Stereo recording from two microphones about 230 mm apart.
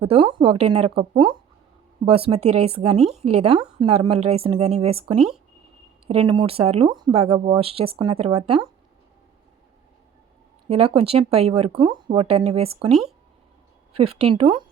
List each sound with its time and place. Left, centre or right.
0.0 s speech: right
10.7 s speech: right
12.9 s speech: centre
13.9 s speech: right